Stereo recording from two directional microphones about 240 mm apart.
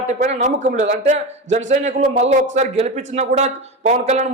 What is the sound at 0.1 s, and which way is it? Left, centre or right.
A man's voice, right.